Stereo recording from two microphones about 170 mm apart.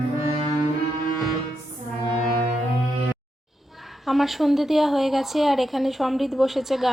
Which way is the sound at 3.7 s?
Centre (ahead or behind).